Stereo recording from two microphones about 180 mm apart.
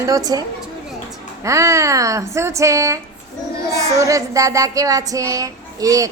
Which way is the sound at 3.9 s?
20° right (ahead or behind).